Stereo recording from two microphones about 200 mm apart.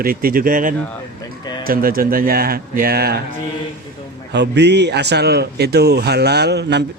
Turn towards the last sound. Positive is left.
turn(degrees=-55)  # may be behind; listen again after turning